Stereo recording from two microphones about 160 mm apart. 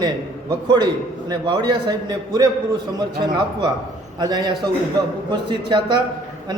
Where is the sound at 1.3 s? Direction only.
25° right (ahead or behind).